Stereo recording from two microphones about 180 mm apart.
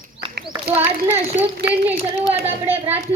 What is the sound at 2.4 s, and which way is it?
Speech, 35° right (ahead or behind).